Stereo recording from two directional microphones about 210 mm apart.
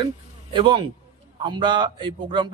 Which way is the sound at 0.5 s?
25° right (ahead or behind).